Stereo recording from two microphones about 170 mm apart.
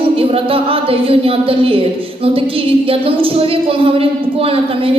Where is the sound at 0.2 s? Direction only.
35° right (ahead or behind).